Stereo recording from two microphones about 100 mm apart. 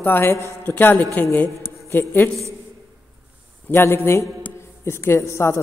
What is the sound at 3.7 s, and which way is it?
A woman's voice, 25° left (ahead or behind).